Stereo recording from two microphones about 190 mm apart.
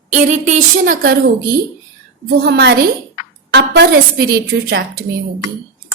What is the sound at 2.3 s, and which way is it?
A woman's voice, 60° right (ahead or behind).